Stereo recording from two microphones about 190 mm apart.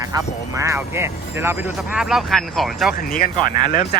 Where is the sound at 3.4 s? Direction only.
45° left (ahead or behind).